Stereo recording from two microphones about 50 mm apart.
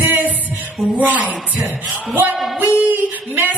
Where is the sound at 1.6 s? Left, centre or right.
Right.